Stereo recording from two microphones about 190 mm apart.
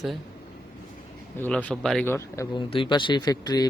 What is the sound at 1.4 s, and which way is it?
Speech, 5° left (ahead or behind).